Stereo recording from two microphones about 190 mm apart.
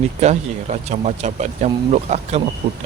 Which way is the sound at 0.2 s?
35° right (ahead or behind).